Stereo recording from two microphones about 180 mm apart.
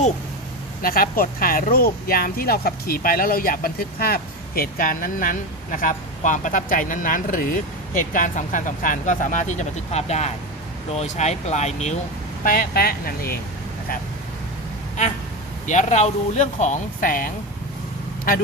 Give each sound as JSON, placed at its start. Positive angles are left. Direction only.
{"t": 0.8, "sound": "speech", "side_deg": 55}
{"t": 12.5, "sound": "speech", "side_deg": 55}
{"t": 15.6, "sound": "speech", "side_deg": 45}